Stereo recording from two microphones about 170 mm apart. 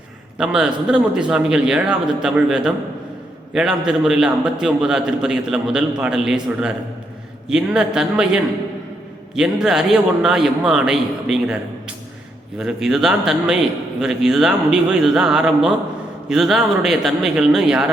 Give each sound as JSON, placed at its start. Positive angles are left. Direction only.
{"t": 0.3, "sound": "a man's voice", "side_deg": -5}
{"t": 12.5, "sound": "a man's voice", "side_deg": -5}